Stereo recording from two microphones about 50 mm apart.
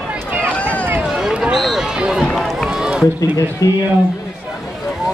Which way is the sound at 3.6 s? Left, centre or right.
Left.